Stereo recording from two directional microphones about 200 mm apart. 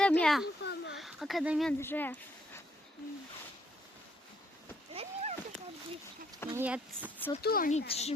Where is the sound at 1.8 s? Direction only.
10° left (ahead or behind).